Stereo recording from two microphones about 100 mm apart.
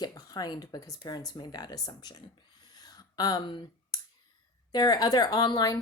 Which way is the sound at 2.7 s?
40° left (ahead or behind).